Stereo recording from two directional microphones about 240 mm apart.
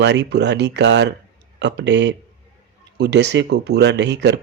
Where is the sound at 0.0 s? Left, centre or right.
Right.